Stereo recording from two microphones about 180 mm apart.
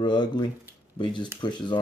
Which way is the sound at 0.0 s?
25° left (ahead or behind).